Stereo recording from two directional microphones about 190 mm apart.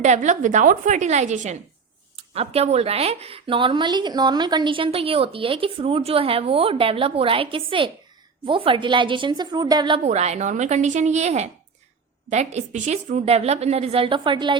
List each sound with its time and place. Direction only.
0.0 s a woman's voice: 40° right (ahead or behind); by 10.0 s 25° right (ahead or behind)
10.0 s a woman's voice: 35° right (ahead or behind)